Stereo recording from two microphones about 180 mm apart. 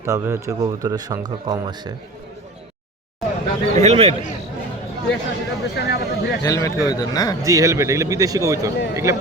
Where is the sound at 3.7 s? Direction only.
35° right (ahead or behind).